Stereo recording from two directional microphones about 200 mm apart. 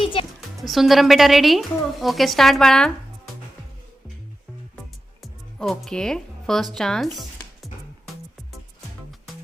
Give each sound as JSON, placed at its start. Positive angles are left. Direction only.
{"t": 0.0, "sound": "music", "side_deg": 25}
{"t": 0.6, "sound": "a woman's voice", "side_deg": 0}
{"t": 5.2, "sound": "music", "side_deg": 0}